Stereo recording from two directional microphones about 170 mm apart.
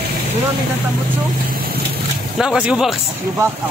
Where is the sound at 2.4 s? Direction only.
5° right (ahead or behind).